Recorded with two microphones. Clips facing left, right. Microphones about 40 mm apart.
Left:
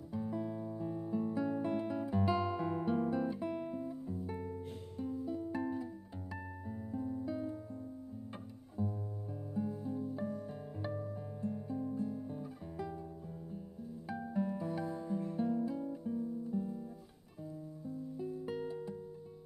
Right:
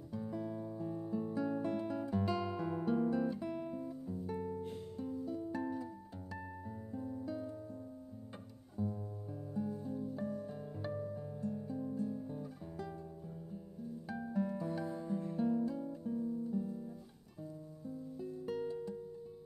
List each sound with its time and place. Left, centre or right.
0.1 s music: centre
8.8 s music: centre
11.4 s guitar: centre
14.0 s music: centre
15.6 s music: centre
16.4 s guitar: centre
18.2 s music: centre